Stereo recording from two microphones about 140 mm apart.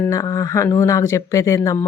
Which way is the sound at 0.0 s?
25° left (ahead or behind).